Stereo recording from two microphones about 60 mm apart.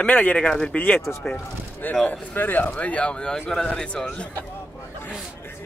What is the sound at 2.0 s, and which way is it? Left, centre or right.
Speech, left.